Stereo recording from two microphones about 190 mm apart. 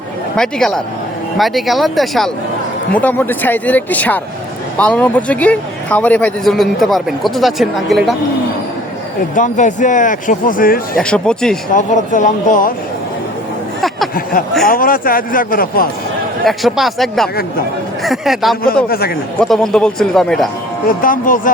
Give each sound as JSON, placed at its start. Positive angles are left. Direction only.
{"t": 0.3, "sound": "speech", "side_deg": 5}
{"t": 9.3, "sound": "speech", "side_deg": 40}
{"t": 11.0, "sound": "speech", "side_deg": 5}
{"t": 11.7, "sound": "speech", "side_deg": 40}
{"t": 14.7, "sound": "speech", "side_deg": 45}
{"t": 16.4, "sound": "speech", "side_deg": 0}
{"t": 18.9, "sound": "speech", "side_deg": 55}
{"t": 19.4, "sound": "speech", "side_deg": 0}
{"t": 20.8, "sound": "speech", "side_deg": 45}